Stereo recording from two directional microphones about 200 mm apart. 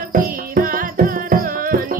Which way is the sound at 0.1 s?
45° right (ahead or behind).